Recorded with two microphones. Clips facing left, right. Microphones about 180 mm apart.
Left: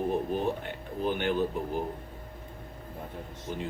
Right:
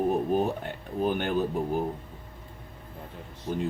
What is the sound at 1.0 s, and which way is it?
Speech, 45° right (ahead or behind).